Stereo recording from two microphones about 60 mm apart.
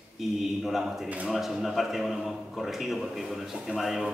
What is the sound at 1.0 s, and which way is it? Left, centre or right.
Speech, right.